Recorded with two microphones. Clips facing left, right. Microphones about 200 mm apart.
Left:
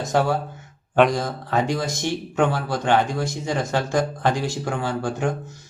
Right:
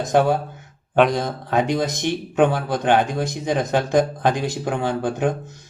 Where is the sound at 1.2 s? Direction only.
20° right (ahead or behind).